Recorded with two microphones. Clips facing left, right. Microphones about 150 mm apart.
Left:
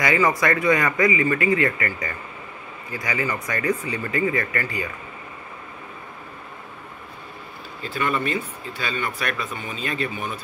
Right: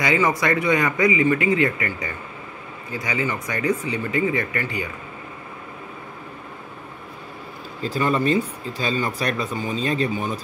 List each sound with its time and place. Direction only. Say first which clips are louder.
0.0 s speech: even; 20° right (ahead or behind)
7.8 s speech: right 4 dB; 35° right (ahead or behind)